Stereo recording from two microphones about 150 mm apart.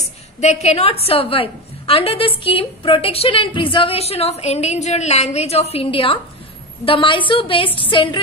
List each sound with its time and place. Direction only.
0.4 s a woman's voice: 50° left (ahead or behind)